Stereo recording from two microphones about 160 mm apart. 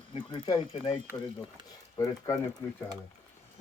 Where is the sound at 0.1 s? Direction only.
30° left (ahead or behind).